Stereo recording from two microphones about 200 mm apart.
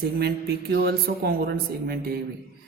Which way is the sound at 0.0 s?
55° right (ahead or behind).